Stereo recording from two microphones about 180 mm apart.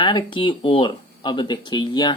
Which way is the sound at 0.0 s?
25° left (ahead or behind).